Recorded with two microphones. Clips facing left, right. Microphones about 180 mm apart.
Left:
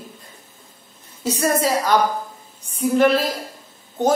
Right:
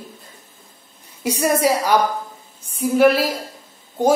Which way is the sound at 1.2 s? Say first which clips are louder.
Right 2 dB; 10° right (ahead or behind).